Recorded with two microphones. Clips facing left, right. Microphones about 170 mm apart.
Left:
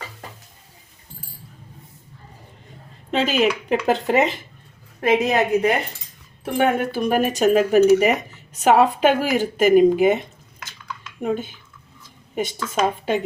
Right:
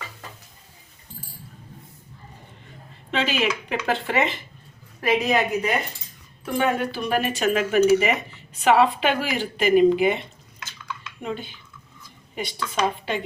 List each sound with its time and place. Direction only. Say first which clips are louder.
3.1 s speech: left 5 dB; 40° left (ahead or behind)